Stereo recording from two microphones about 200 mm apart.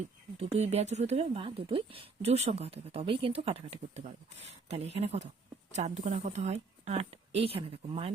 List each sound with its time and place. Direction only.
0.3 s a woman's voice: 30° right (ahead or behind)